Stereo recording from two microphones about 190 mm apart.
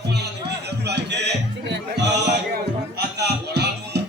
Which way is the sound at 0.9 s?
60° right (ahead or behind).